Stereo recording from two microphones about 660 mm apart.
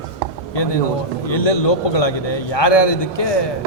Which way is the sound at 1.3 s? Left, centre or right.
Left.